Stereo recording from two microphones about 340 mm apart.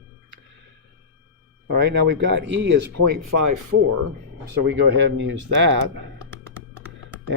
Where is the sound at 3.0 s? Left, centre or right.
Right.